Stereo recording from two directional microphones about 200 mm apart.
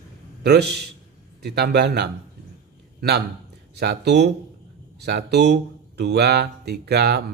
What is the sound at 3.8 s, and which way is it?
Speech, 55° right (ahead or behind).